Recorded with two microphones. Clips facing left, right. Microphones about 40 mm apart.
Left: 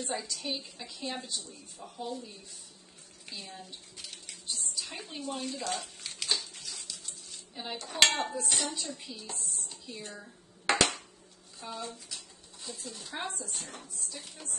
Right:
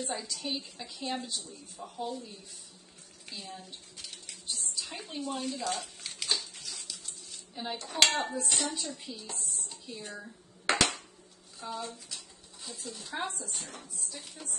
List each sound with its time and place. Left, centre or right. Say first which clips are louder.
0.0 s a woman's voice: even; centre
4.7 s a sound: right 1 dB; centre
8.7 s dishes: right 1 dB; centre
11.6 s a woman's voice: right 2 dB; centre